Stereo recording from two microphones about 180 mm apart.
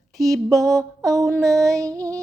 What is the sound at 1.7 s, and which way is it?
Mantra, 20° right (ahead or behind).